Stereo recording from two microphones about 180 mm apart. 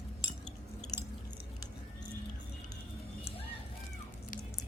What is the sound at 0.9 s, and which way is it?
Chewing, 20° left (ahead or behind).